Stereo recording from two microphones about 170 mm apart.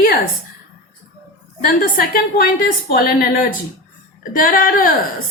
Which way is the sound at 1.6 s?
60° left (ahead or behind).